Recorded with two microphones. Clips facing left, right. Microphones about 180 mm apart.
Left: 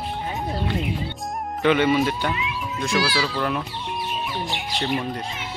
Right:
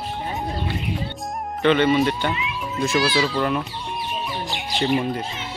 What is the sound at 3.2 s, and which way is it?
Speech, centre (ahead or behind).